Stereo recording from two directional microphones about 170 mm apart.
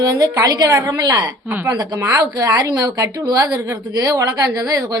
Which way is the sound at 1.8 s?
20° right (ahead or behind).